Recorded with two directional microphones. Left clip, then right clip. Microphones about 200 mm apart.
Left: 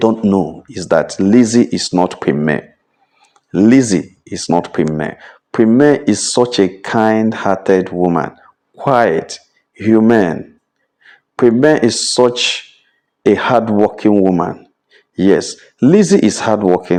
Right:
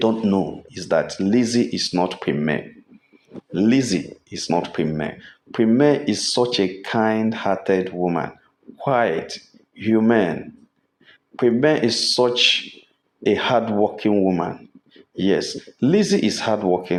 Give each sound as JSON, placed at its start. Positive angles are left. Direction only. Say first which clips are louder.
{"t": 0.0, "sound": "speech", "louder": "left 7 dB", "side_deg": 40}